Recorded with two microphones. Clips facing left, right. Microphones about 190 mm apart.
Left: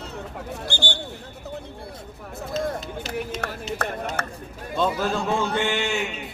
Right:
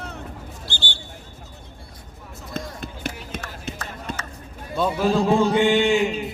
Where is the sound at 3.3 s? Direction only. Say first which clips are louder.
Left 3 dB; 60° right (ahead or behind).